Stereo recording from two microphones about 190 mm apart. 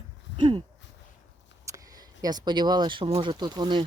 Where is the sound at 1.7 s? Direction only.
15° right (ahead or behind).